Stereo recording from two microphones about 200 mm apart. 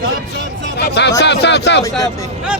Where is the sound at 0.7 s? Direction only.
55° left (ahead or behind).